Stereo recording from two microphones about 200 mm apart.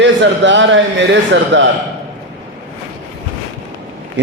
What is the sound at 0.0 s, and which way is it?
Speech, 65° right (ahead or behind).